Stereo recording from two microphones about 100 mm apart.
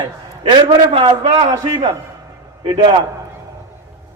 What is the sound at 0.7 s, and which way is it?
A man's voice, 65° right (ahead or behind).